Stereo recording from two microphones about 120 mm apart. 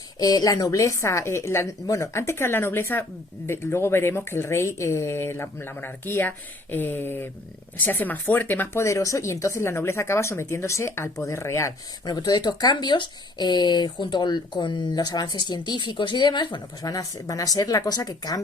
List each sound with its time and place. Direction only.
0.2 s speech: 30° left (ahead or behind)
12.0 s speech: 35° left (ahead or behind)